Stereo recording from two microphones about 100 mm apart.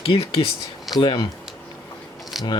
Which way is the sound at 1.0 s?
50° left (ahead or behind).